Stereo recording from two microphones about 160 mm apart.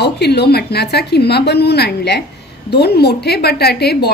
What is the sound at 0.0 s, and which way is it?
A woman's voice, 90° left.